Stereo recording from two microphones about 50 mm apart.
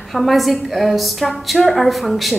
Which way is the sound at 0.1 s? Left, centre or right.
Centre.